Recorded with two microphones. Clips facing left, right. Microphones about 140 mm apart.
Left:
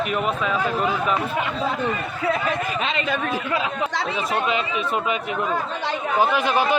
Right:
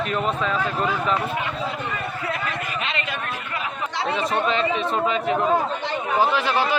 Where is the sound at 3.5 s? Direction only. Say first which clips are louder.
Left 5 dB; 90° left.